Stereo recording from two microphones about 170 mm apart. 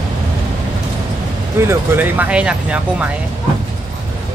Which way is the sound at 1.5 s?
15° right (ahead or behind).